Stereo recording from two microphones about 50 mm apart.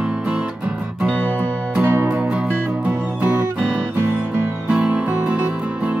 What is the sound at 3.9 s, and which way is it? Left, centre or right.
Music, right.